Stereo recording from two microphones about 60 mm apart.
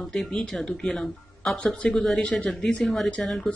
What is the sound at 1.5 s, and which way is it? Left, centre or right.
Speech, left.